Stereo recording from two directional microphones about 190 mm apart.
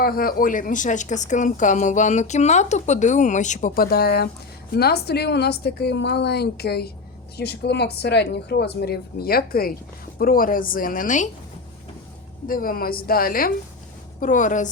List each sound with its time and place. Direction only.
0.0 s a woman's voice: 50° left (ahead or behind)
12.5 s a woman's voice: 50° left (ahead or behind)